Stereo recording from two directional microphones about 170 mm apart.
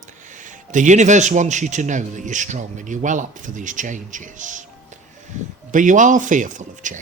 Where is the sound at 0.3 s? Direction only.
45° right (ahead or behind).